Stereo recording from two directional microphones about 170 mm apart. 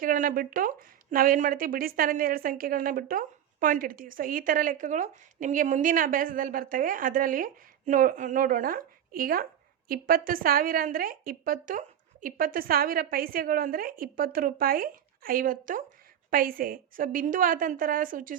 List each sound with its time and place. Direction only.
0.0 s speech: 55° right (ahead or behind)